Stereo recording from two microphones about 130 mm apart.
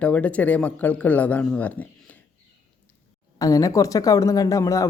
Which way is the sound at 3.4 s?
25° left (ahead or behind).